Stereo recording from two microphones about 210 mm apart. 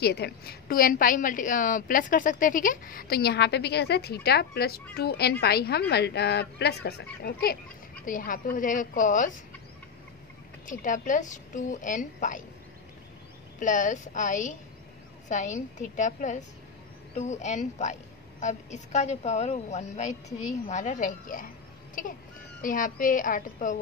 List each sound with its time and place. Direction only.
0.0 s a woman's voice: 50° left (ahead or behind)
10.7 s a woman's voice: 40° left (ahead or behind)
13.6 s a woman's voice: 35° left (ahead or behind)